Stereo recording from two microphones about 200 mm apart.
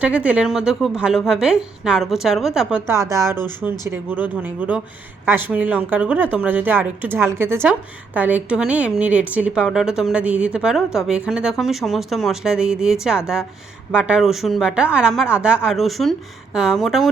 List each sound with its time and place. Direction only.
0.0 s a woman's voice: 5° right (ahead or behind)